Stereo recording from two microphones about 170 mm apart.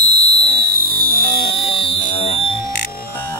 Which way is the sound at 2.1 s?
35° left (ahead or behind).